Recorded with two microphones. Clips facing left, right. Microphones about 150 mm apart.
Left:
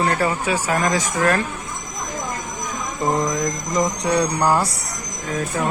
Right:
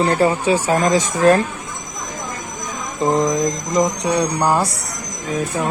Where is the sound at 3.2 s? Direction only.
20° right (ahead or behind).